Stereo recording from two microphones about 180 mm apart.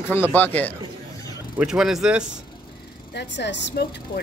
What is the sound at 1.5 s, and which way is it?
Speech, 5° right (ahead or behind).